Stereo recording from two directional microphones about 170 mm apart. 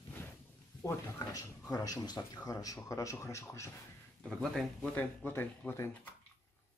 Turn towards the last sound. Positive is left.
turn(degrees=15)  # may be behind; listen again after turning